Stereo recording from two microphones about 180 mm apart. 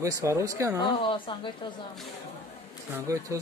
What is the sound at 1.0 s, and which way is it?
Speech, 30° left (ahead or behind).